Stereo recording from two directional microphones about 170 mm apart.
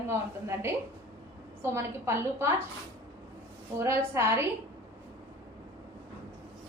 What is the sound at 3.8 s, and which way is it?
Speech, 15° right (ahead or behind).